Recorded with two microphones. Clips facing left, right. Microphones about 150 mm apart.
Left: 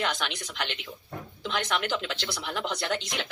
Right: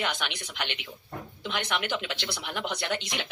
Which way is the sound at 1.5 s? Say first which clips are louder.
Left 2 dB; 40° left (ahead or behind).